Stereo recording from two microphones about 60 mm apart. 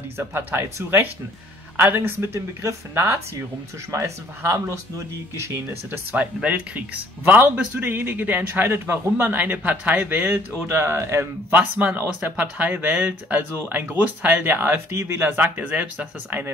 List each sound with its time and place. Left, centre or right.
0.2 s speech: right
4.6 s speech: right
5.9 s speech: right
11.8 s speech: right